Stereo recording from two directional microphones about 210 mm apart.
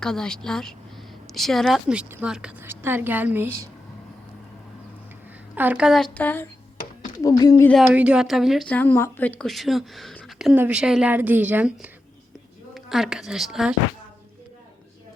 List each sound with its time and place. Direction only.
0.0 s a woman's voice: 5° left (ahead or behind)
5.5 s a woman's voice: 5° right (ahead or behind); by 7.7 s 20° left (ahead or behind)
7.7 s a woman's voice: 5° right (ahead or behind)